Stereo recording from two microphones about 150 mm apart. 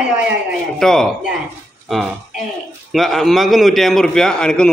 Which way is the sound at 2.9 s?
Centre (ahead or behind).